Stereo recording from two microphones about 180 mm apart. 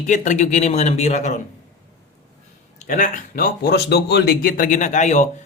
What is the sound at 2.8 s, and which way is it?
Speech, 45° left (ahead or behind).